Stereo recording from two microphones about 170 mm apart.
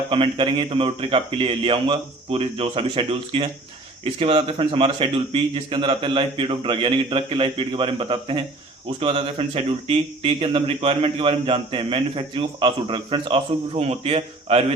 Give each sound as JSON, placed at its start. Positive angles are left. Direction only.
{"t": 0.1, "sound": "speech", "side_deg": -30}